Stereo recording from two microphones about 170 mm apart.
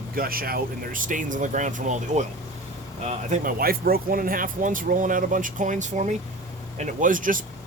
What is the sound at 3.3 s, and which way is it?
Speech, 60° right (ahead or behind).